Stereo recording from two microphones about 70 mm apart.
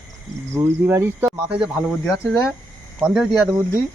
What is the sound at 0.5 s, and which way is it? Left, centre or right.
Speech, right.